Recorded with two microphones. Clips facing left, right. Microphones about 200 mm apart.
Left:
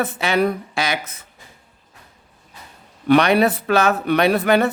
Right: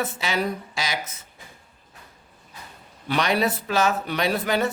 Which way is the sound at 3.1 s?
60° left (ahead or behind).